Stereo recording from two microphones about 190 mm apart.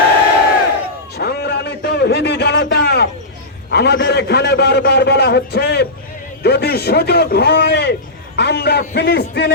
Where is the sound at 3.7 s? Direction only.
60° left (ahead or behind).